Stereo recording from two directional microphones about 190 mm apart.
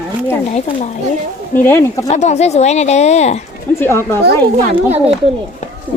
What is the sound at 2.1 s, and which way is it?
Speech, 35° left (ahead or behind).